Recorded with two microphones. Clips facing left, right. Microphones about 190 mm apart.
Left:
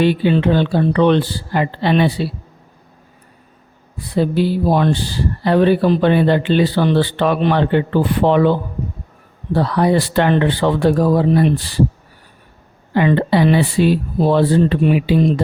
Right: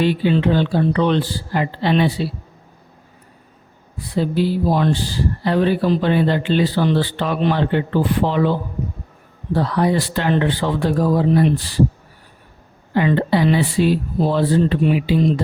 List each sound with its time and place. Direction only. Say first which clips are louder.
0.0 s speech: left 2 dB; 60° left (ahead or behind)
4.1 s speech: left 2 dB; 60° left (ahead or behind)
9.6 s speech: left 3 dB; 70° left (ahead or behind)
12.9 s speech: left 2 dB; 65° left (ahead or behind)